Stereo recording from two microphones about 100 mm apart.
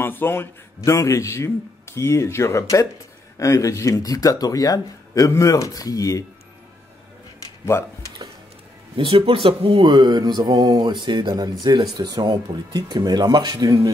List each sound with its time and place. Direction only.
0.0 s a man's voice: 20° left (ahead or behind)
8.9 s speech: 70° right (ahead or behind); by 13.7 s 40° right (ahead or behind)